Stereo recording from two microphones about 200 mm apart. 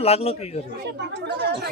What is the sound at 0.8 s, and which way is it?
Speech, 55° right (ahead or behind).